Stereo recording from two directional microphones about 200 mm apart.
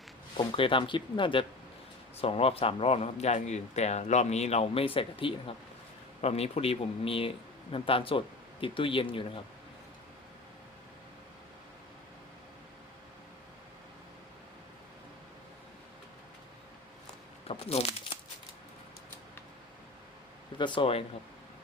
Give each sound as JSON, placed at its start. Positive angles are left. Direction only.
{"t": 0.3, "sound": "a man's voice", "side_deg": 25}
{"t": 17.5, "sound": "speech", "side_deg": 30}
{"t": 20.6, "sound": "a man's voice", "side_deg": 25}